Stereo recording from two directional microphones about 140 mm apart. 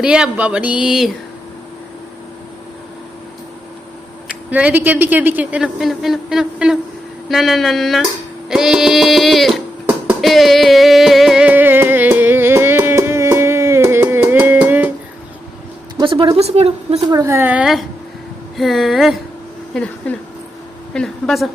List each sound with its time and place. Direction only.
0.0 s speech: 5° right (ahead or behind)
4.3 s speech: 10° right (ahead or behind)
7.3 s music: centre (ahead or behind)
16.0 s a woman's voice: 35° right (ahead or behind)
17.1 s speech: 25° right (ahead or behind); by 17.8 s 5° right (ahead or behind)
18.5 s music: centre (ahead or behind)
19.7 s speech: 10° left (ahead or behind)
20.9 s music: 5° left (ahead or behind)